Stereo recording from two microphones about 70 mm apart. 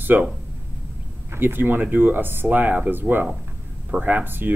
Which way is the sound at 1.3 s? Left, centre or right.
Right.